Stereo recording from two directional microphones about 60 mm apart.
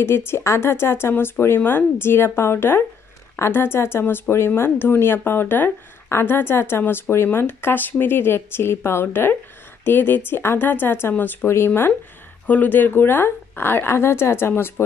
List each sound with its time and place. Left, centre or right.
0.0 s speech: left
12.4 s speech: left